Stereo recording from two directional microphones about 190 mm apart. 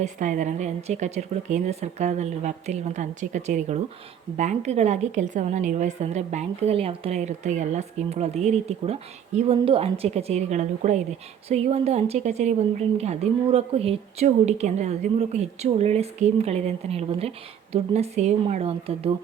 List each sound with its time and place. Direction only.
0.0 s speech: 40° right (ahead or behind)